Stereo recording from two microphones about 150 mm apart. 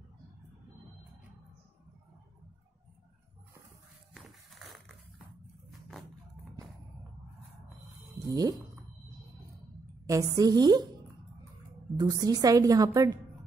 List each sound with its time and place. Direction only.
4.1 s a sound: centre (ahead or behind)
5.7 s music: centre (ahead or behind)
8.3 s a woman's voice: 25° right (ahead or behind)
10.0 s a woman's voice: 20° right (ahead or behind)
12.0 s a woman's voice: 25° right (ahead or behind)